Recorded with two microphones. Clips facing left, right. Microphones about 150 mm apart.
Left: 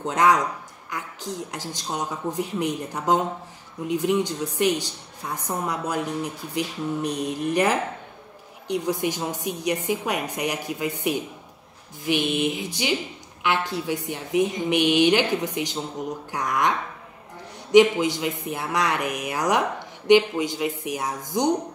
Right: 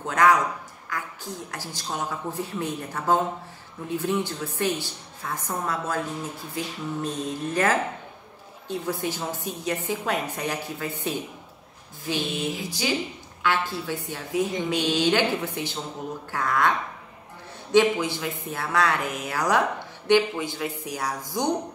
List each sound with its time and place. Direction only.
0.0 s a woman's voice: 20° left (ahead or behind)
17.7 s a woman's voice: 15° left (ahead or behind)